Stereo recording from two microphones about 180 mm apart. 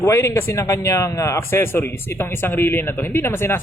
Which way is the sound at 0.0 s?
15° left (ahead or behind).